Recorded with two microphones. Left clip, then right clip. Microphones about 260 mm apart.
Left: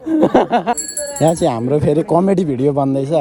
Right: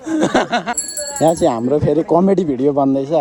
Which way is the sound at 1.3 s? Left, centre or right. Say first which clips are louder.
Right 1 dB; left.